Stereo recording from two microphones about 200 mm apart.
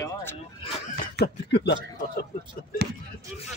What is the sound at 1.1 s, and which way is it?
Speech, 55° left (ahead or behind).